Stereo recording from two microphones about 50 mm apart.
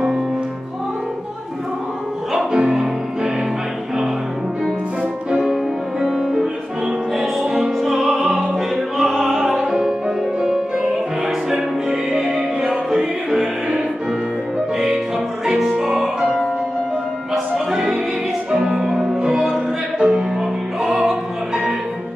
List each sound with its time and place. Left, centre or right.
2.3 s music: centre
5.4 s music: centre
15.4 s music: centre
18.5 s music: centre
19.2 s opera: centre